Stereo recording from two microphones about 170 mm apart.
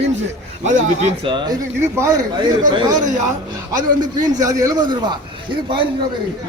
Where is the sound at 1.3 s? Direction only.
25° right (ahead or behind).